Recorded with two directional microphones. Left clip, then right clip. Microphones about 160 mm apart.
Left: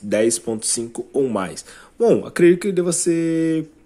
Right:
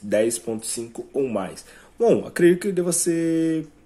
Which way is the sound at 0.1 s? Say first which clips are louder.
Left 3 dB; 25° left (ahead or behind).